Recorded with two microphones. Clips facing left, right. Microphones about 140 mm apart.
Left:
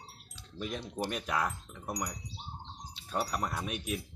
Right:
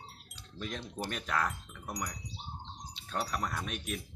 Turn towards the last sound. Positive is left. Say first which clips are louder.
# left 1 dB
turn(degrees=10)  # may be behind; listen again after turning